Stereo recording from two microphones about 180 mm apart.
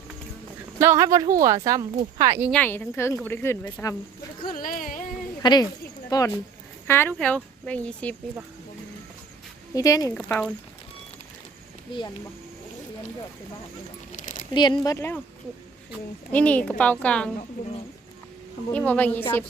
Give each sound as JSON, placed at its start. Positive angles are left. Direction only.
{"t": 0.8, "sound": "speech", "side_deg": -15}
{"t": 2.5, "sound": "speech", "side_deg": 10}
{"t": 4.4, "sound": "speech", "side_deg": 50}
{"t": 5.4, "sound": "speech", "side_deg": 25}
{"t": 9.7, "sound": "speech", "side_deg": 20}
{"t": 10.2, "sound": "speech", "side_deg": 5}
{"t": 14.1, "sound": "a sound", "side_deg": 45}
{"t": 14.5, "sound": "speech", "side_deg": 25}
{"t": 16.3, "sound": "speech", "side_deg": 10}
{"t": 18.7, "sound": "speech", "side_deg": 10}